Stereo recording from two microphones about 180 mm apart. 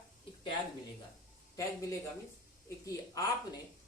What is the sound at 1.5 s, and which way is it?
Speech, 15° left (ahead or behind).